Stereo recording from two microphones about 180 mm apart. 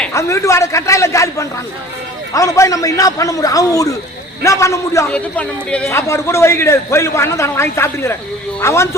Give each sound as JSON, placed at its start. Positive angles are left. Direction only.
{"t": 0.1, "sound": "a man's voice", "side_deg": 15}